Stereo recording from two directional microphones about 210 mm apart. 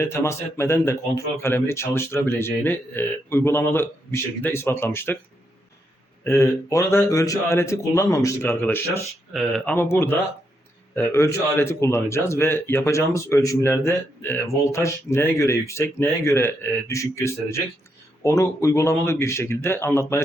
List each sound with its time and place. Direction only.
0.0 s speech: 10° left (ahead or behind)
6.2 s speech: 10° left (ahead or behind)